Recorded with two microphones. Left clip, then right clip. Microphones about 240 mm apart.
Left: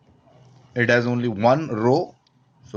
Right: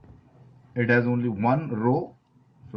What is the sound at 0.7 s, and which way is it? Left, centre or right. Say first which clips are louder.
Speech: left 4 dB; left.